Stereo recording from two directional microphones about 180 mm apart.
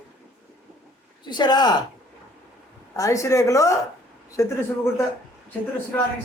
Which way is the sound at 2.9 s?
15° left (ahead or behind).